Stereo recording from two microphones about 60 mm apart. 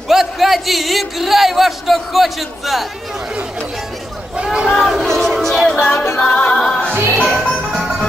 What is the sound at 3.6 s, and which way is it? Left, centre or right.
Chatter, centre.